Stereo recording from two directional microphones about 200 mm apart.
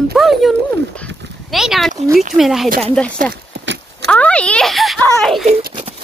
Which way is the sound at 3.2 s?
45° right (ahead or behind).